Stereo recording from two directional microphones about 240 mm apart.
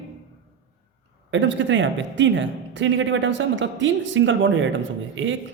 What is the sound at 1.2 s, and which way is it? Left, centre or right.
Speech, right.